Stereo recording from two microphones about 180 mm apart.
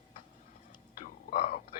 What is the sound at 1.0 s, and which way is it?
Whispering, 45° left (ahead or behind).